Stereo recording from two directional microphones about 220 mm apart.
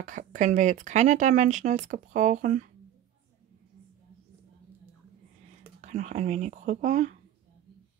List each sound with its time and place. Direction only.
0.0 s speech: 35° right (ahead or behind)
5.8 s speech: 30° right (ahead or behind)